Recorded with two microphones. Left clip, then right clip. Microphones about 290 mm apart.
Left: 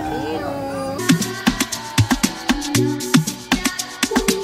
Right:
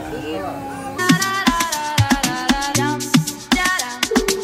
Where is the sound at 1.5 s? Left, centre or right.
Centre.